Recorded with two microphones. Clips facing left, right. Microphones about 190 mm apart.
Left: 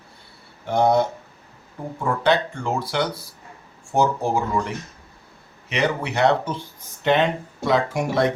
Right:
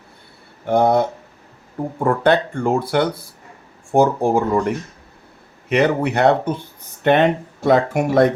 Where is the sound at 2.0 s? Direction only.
55° right (ahead or behind).